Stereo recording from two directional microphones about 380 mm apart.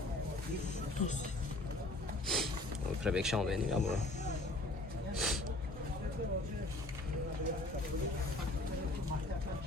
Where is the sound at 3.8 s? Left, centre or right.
Centre.